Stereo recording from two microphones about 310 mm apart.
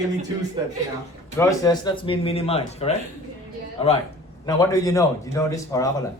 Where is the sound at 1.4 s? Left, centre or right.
Centre.